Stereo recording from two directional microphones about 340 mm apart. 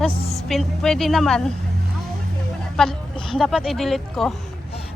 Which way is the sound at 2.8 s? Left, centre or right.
Centre.